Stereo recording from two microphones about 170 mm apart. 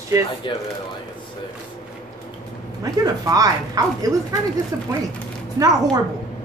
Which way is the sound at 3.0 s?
20° right (ahead or behind).